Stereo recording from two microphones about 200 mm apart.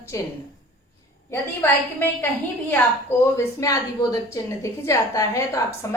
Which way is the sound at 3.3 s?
15° left (ahead or behind).